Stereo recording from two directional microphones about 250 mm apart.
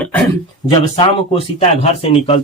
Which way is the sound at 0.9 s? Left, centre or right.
Left.